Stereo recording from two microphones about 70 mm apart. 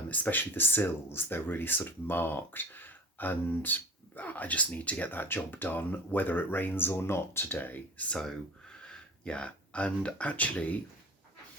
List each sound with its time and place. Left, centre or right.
0.1 s speech: left
8.1 s speech: centre